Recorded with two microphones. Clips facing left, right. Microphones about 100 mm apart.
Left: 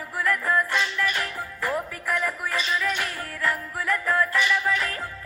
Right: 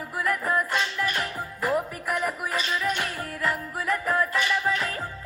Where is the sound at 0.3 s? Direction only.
15° right (ahead or behind).